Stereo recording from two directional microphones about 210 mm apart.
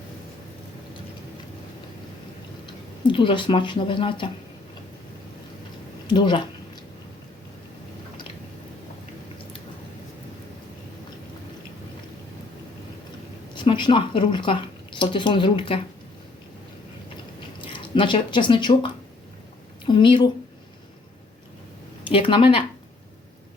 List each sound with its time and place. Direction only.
3.0 s speech: 25° left (ahead or behind)
6.1 s speech: 20° left (ahead or behind)
13.5 s speech: 20° left (ahead or behind)
17.6 s a woman's voice: 25° left (ahead or behind)
22.1 s speech: 25° left (ahead or behind)